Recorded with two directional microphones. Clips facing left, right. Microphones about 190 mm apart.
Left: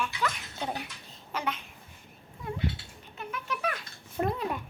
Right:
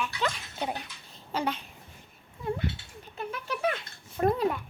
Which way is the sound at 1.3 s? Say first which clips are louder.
Right 3 dB; 30° right (ahead or behind).